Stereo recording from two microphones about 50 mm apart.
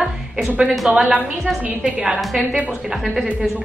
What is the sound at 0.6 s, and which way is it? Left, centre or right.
Speech, centre.